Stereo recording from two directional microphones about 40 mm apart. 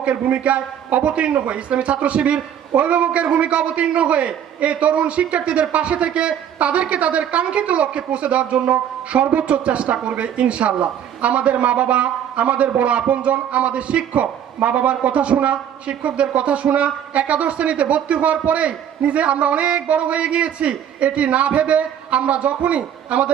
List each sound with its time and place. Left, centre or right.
0.0 s a man's voice: right